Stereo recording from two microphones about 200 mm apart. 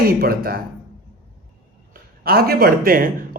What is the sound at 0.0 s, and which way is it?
Speech, 50° right (ahead or behind).